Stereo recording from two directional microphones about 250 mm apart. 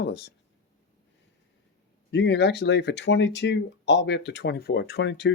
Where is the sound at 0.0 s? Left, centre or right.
Left.